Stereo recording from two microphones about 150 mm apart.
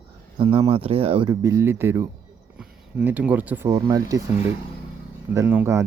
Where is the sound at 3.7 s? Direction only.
25° right (ahead or behind).